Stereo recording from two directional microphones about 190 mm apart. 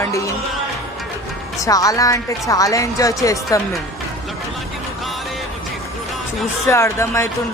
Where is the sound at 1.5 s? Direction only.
15° left (ahead or behind).